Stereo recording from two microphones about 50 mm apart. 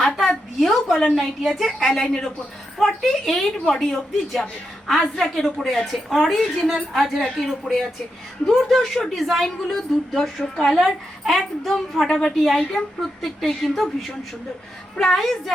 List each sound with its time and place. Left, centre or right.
0.0 s a sound: centre
1.1 s a woman's voice: centre
14.9 s a woman's voice: centre